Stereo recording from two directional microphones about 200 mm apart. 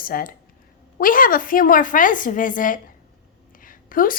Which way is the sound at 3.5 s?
45° left (ahead or behind).